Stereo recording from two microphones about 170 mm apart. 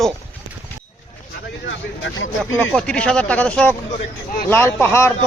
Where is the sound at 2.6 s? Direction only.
5° left (ahead or behind).